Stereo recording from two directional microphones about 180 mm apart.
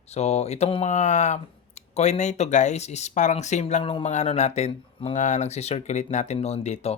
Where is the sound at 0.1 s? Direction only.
35° left (ahead or behind).